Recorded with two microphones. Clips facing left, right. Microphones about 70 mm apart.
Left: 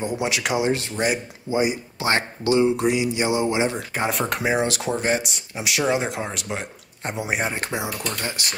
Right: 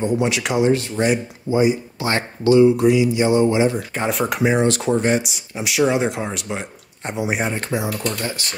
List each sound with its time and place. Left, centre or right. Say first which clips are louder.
0.0 s speech: right 5 dB; centre
2.5 s speech: right 6 dB; left
3.3 s speech: right 5 dB; centre
7.5 s speech: right 4 dB; centre
8.0 s speech: right 4 dB; centre